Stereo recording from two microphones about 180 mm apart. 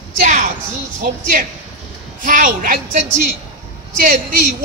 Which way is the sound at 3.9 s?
50° right (ahead or behind).